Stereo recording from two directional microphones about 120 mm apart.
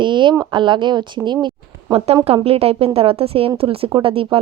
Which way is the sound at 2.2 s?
55° right (ahead or behind).